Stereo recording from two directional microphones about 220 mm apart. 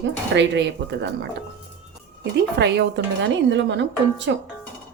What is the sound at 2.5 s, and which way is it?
A woman's voice, 50° right (ahead or behind).